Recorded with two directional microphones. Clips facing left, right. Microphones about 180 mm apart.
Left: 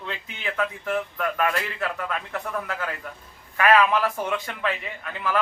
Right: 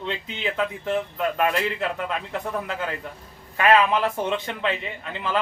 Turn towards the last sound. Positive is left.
turn(degrees=-25)  # may be behind; listen again after turning